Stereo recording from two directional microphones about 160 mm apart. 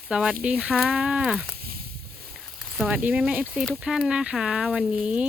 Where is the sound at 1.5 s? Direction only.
70° right (ahead or behind).